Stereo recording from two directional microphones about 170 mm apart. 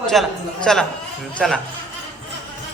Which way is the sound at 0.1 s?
Centre (ahead or behind).